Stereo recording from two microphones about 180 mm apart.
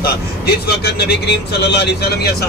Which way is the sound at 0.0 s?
65° left (ahead or behind).